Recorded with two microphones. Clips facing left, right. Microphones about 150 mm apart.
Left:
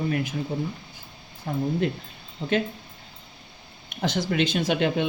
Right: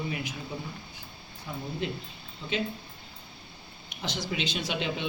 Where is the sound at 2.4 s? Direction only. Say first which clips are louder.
Left 8 dB; 35° left (ahead or behind).